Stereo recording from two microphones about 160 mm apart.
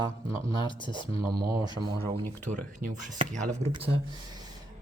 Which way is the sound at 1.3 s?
75° right (ahead or behind).